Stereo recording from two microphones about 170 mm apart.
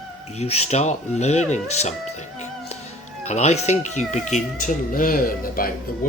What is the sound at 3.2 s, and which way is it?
Speech, 40° left (ahead or behind).